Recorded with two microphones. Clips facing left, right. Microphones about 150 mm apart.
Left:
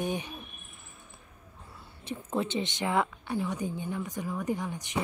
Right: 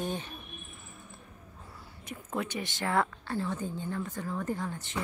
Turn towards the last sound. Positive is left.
turn(degrees=15)  # may be behind; listen again after turning